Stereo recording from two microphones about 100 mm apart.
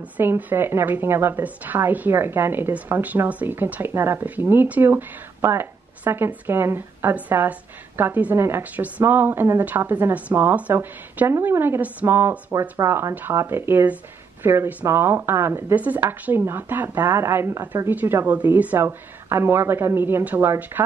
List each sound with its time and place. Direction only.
0.2 s a woman's voice: 20° right (ahead or behind)